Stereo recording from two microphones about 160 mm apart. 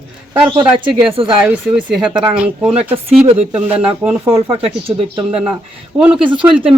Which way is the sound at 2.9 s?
40° right (ahead or behind).